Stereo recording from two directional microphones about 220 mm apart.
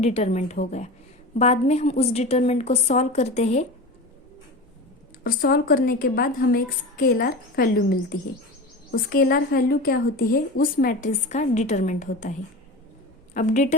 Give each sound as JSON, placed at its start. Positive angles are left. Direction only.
{"t": 0.0, "sound": "a woman's voice", "side_deg": 30}
{"t": 5.2, "sound": "a woman's voice", "side_deg": 45}